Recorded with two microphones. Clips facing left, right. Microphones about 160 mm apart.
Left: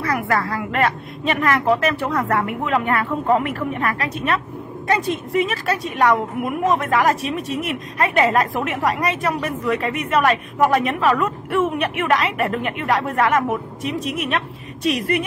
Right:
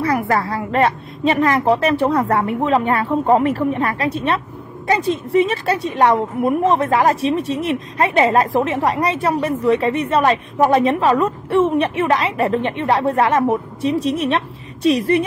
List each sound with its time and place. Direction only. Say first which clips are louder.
0.0 s a woman's voice: right 3 dB; 30° right (ahead or behind)